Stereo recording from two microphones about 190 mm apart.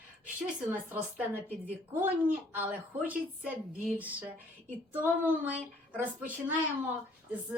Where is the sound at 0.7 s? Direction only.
10° right (ahead or behind).